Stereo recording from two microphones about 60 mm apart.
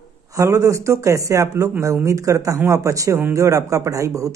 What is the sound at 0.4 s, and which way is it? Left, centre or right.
Speech, right.